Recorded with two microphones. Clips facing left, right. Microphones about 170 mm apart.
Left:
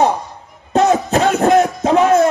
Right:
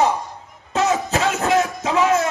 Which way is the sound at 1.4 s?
50° left (ahead or behind).